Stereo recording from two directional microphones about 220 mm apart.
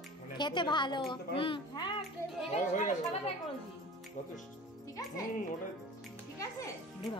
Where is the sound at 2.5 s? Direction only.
35° left (ahead or behind).